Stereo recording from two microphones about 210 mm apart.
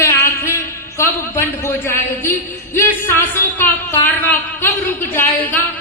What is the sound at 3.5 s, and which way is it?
A woman's voice, 10° left (ahead or behind).